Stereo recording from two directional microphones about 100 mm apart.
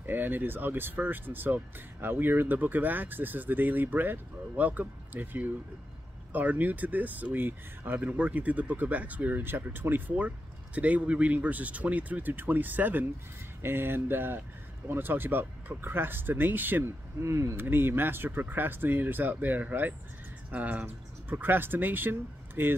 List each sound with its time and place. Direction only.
0.0 s speech: 20° right (ahead or behind)